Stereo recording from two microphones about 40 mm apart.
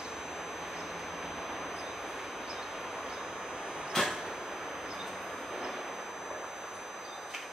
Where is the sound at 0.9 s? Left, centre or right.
Centre.